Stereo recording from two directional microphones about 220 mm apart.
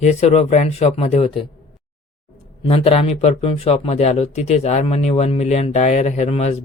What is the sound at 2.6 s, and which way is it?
Speech, 25° left (ahead or behind).